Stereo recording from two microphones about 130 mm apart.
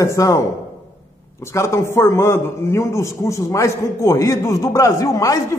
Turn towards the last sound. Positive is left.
turn(degrees=25)  # may be behind; listen again after turning